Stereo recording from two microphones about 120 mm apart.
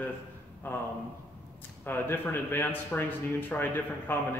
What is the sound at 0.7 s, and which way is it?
Speech, 20° left (ahead or behind).